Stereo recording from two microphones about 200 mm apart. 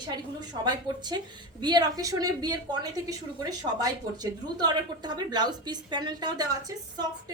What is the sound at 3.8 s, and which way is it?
Speech, 20° right (ahead or behind).